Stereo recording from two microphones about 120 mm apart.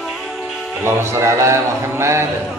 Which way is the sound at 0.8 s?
20° right (ahead or behind).